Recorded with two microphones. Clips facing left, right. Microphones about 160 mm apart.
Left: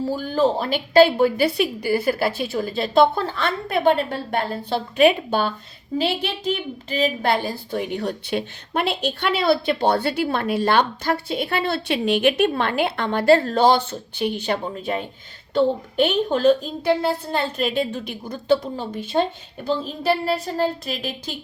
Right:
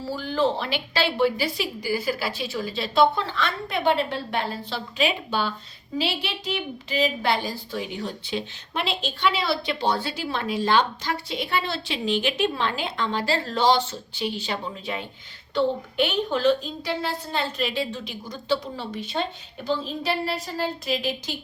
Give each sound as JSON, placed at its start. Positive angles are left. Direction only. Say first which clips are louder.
{"t": 0.1, "sound": "a woman's voice", "louder": "left 2 dB", "side_deg": 45}